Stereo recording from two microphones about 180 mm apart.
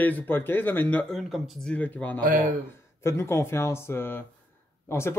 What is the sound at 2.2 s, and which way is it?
Speech, 50° right (ahead or behind).